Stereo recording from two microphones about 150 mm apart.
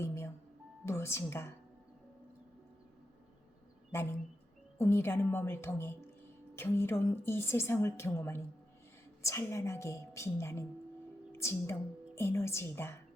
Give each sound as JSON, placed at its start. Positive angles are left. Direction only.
{"t": 0.0, "sound": "music", "side_deg": 15}
{"t": 0.9, "sound": "speech", "side_deg": 20}
{"t": 4.8, "sound": "a woman's voice", "side_deg": 15}